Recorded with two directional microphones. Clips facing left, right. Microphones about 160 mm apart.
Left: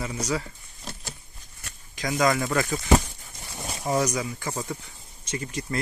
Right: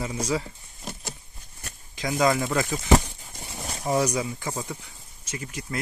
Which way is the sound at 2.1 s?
5° right (ahead or behind).